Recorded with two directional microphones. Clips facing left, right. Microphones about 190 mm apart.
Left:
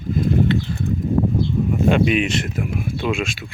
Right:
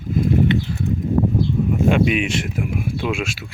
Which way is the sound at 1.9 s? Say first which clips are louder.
Left 2 dB; 5° right (ahead or behind).